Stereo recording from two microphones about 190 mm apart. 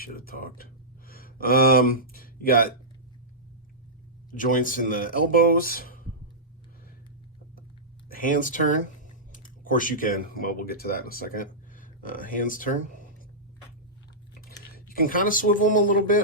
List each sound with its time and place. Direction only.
0.0 s speech: 50° left (ahead or behind)
4.3 s speech: 45° left (ahead or behind)
8.1 s speech: 45° left (ahead or behind)
14.8 s speech: 50° left (ahead or behind)